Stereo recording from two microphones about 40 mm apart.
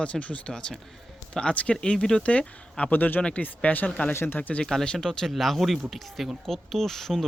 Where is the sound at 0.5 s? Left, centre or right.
Left.